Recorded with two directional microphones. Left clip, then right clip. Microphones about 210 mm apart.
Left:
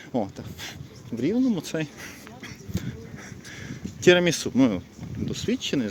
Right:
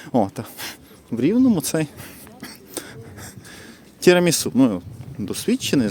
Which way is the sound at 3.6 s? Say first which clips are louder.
Right 3 dB; 25° right (ahead or behind).